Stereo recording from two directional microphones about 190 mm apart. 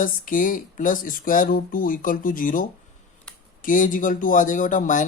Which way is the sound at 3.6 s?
45° left (ahead or behind).